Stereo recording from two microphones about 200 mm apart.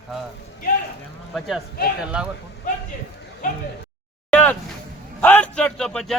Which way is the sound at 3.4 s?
40° left (ahead or behind).